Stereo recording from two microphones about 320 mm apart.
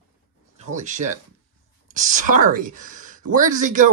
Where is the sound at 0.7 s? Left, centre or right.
Right.